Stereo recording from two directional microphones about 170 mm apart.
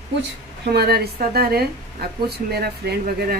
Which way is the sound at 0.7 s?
70° right (ahead or behind).